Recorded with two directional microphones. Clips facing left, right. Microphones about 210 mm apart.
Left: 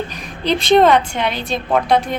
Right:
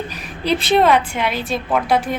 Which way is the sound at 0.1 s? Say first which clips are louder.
Left 1 dB; 5° right (ahead or behind).